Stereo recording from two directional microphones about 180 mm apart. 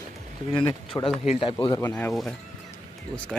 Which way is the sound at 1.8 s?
10° left (ahead or behind).